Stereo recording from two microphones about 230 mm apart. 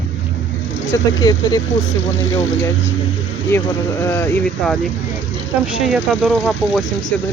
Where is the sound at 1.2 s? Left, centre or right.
Centre.